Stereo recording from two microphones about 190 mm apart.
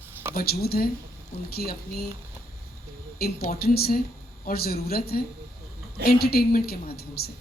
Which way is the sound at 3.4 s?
55° left (ahead or behind).